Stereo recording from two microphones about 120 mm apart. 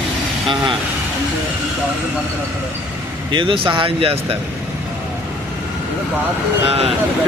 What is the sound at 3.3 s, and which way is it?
Speech, 45° right (ahead or behind).